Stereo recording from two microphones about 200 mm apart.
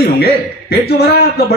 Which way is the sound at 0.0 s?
50° left (ahead or behind).